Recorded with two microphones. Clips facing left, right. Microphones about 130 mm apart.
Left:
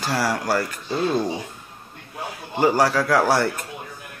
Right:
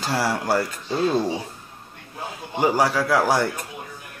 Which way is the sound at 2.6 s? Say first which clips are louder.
Left 1 dB; 15° right (ahead or behind).